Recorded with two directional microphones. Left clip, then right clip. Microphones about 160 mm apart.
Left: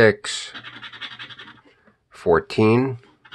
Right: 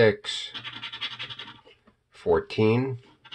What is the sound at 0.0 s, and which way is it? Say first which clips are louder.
Speech: left 5 dB; 50° left (ahead or behind).